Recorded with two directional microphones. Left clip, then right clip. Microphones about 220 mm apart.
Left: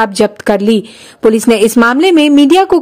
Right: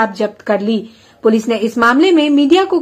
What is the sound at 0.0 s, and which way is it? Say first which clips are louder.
A woman's voice: left 5 dB; 50° left (ahead or behind).